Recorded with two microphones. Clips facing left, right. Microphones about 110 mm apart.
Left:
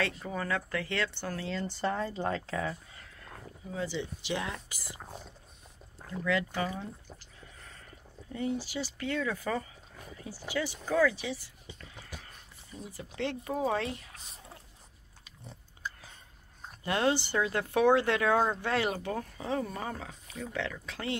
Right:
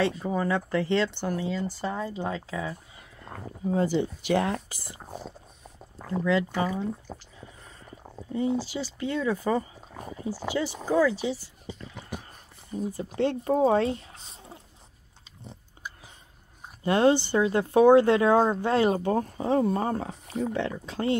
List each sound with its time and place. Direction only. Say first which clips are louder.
0.0 s speech: right 7 dB; 20° right (ahead or behind)
3.3 s speech: right 14 dB; 60° right (ahead or behind)
4.6 s speech: right 2 dB; 35° right (ahead or behind)
6.2 s speech: right 5 dB; 30° right (ahead or behind)
8.3 s speech: right 6 dB; 20° right (ahead or behind)
12.2 s a sound: right 4 dB; 40° right (ahead or behind)
13.4 s speech: right 9 dB; 35° right (ahead or behind)
15.8 s whispering: left 1 dB; 15° right (ahead or behind)
16.8 s speech: right 7 dB; 30° right (ahead or behind)
20.5 s speech: right 6 dB; 30° right (ahead or behind)